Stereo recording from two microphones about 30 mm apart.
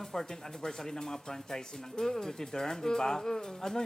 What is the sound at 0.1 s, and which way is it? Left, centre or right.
Speech, centre.